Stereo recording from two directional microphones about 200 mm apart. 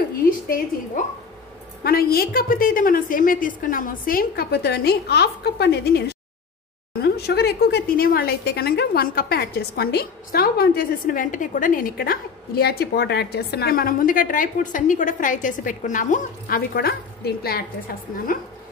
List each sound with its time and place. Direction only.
1.0 s a woman's voice: 40° left (ahead or behind)
1.8 s a woman's voice: 50° left (ahead or behind)